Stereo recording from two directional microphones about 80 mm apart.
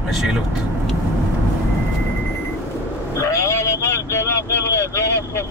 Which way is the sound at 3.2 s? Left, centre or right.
Left.